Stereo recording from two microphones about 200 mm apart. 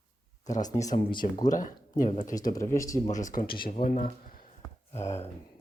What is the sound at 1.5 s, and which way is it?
Speech, 40° left (ahead or behind).